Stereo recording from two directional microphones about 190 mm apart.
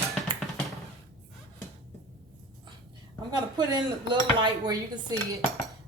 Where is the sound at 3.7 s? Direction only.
25° right (ahead or behind).